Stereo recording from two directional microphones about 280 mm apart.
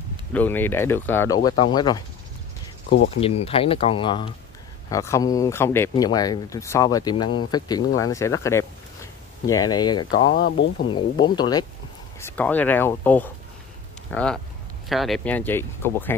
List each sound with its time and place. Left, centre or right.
0.3 s speech: centre
3.2 s speech: centre
10.3 s speech: left
10.9 s speech: centre